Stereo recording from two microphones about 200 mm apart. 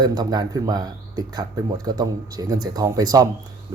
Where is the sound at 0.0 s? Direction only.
20° right (ahead or behind).